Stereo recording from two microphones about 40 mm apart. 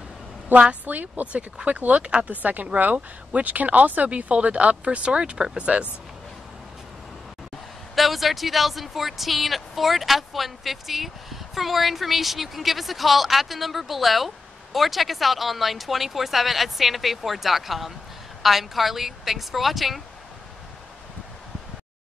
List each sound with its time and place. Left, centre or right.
0.6 s speech: right
2.2 s speech: right
7.9 s speech: centre